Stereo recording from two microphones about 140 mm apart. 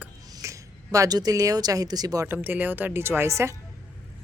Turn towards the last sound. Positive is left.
turn(degrees=-20)  # may be behind; listen again after turning